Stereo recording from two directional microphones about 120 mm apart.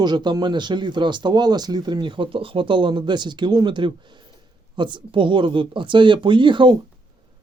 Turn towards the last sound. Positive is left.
turn(degrees=-40)  # may be behind; listen again after turning